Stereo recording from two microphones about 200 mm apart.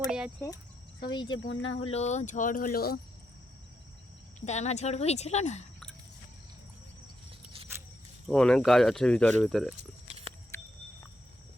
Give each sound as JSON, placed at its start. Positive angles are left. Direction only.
{"t": 1.1, "sound": "speech", "side_deg": 25}
{"t": 1.5, "sound": "speech", "side_deg": 70}
{"t": 1.8, "sound": "speech", "side_deg": 30}
{"t": 4.4, "sound": "speech", "side_deg": 35}
{"t": 8.3, "sound": "speech", "side_deg": 5}